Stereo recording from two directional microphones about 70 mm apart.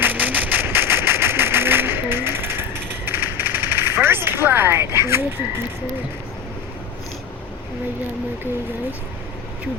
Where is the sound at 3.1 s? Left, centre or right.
Right.